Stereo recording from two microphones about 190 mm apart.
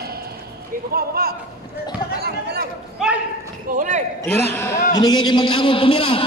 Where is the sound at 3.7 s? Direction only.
40° right (ahead or behind).